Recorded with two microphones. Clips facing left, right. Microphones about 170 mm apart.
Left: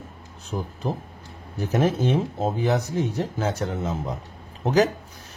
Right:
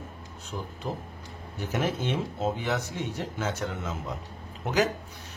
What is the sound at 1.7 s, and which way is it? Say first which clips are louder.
Speech: left 7 dB; 40° left (ahead or behind).